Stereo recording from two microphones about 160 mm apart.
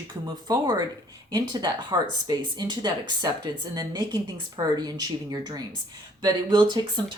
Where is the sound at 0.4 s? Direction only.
25° right (ahead or behind).